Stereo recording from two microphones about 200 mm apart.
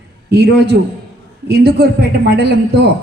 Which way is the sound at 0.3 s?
55° right (ahead or behind).